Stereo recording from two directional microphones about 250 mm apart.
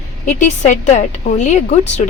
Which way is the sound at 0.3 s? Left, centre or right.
Left.